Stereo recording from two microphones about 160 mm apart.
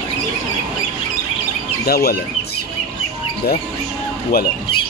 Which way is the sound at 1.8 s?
75° left (ahead or behind).